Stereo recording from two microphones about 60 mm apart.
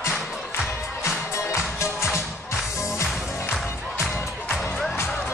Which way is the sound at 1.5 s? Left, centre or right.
Left.